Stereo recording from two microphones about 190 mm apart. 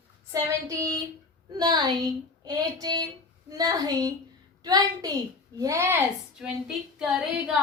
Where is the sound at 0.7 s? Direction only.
15° right (ahead or behind).